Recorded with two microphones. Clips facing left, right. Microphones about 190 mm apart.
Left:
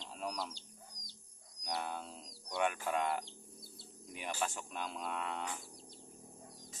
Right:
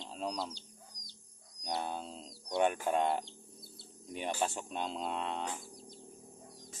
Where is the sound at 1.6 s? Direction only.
30° right (ahead or behind).